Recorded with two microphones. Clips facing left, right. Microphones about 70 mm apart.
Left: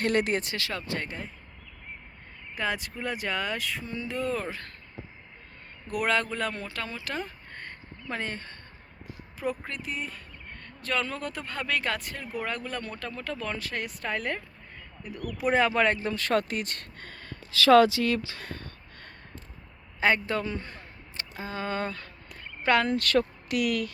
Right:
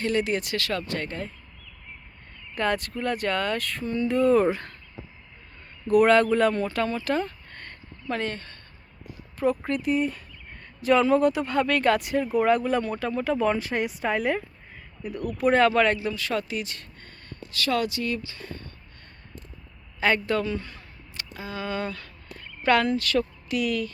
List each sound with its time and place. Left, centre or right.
0.0 s speech: left
0.5 s speech: centre
2.6 s speech: centre
5.9 s speech: centre
7.5 s a sound: centre
9.4 s speech: centre
15.4 s speech: centre
15.7 s speech: left
16.0 s speech: left
17.0 s a sound: left
20.0 s speech: left
20.7 s a sound: left
22.9 s speech: left